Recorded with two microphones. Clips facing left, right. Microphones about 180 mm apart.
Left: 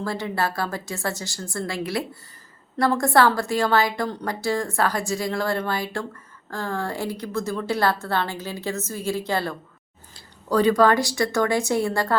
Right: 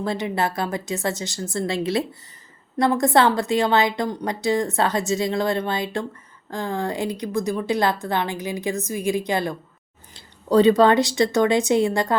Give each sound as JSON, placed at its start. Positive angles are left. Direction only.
{"t": 0.0, "sound": "a woman's voice", "side_deg": -20}